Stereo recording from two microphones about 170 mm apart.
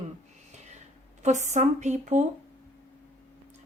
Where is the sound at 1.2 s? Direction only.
45° right (ahead or behind).